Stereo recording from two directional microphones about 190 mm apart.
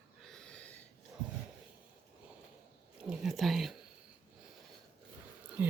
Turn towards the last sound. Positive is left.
turn(degrees=-10)  # may be behind; listen again after turning